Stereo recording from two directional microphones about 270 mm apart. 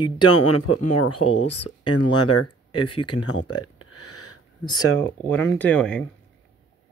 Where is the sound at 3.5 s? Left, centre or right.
Left.